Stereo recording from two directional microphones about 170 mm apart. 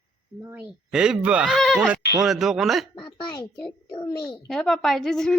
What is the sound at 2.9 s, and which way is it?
A child's voice, 30° left (ahead or behind).